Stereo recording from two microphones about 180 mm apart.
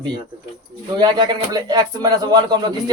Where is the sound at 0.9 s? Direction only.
25° right (ahead or behind).